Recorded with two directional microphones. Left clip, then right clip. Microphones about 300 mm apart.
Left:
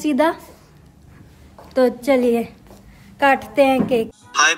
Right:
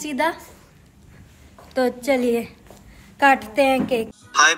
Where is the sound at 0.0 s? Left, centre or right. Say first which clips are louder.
Left 5 dB; centre.